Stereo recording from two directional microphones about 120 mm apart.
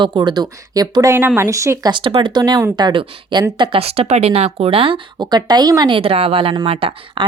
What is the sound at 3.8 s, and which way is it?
Speech, 55° right (ahead or behind).